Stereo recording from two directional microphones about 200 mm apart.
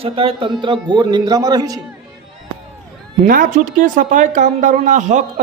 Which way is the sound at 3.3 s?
45° right (ahead or behind).